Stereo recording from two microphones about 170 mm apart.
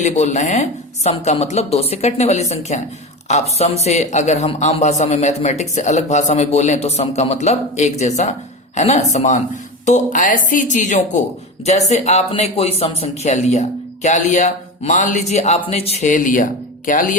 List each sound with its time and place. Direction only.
0.0 s a man's voice: 45° left (ahead or behind)